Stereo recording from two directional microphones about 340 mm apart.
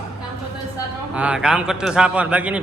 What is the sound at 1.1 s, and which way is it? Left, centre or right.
A man's voice, centre.